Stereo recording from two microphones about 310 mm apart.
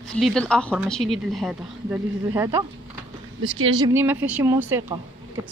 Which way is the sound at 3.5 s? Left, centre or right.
Right.